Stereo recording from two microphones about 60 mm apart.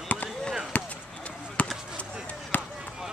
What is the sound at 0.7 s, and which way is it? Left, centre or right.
Basketball bounce, left.